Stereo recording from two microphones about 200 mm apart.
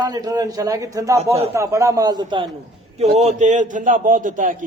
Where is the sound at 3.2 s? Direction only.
35° right (ahead or behind).